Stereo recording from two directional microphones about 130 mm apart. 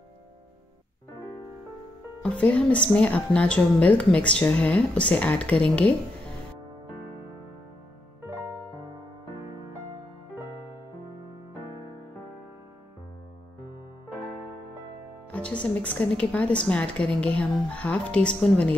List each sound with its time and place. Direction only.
2.2 s a woman's voice: 10° left (ahead or behind)
15.3 s a woman's voice: 10° left (ahead or behind)